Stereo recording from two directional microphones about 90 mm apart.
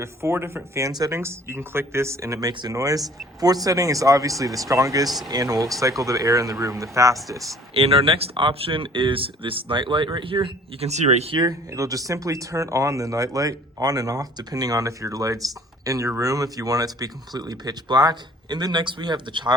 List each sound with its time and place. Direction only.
0.0 s speech: 30° right (ahead or behind)
2.4 s speech: 50° right (ahead or behind)
2.7 s speech: 40° right (ahead or behind)
7.7 s speech: 90° right; by 10.8 s 70° right (ahead or behind)
11.3 s speech: 50° right (ahead or behind)
11.7 s speech: 40° right (ahead or behind); by 19.5 s 60° right (ahead or behind)